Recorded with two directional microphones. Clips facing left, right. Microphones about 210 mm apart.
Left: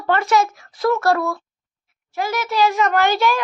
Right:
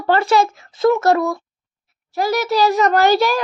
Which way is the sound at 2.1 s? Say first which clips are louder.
Right 5 dB; 40° right (ahead or behind).